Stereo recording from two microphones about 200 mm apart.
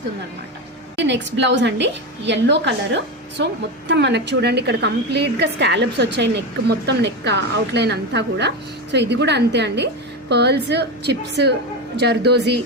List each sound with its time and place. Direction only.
0.9 s a woman's voice: 60° right (ahead or behind)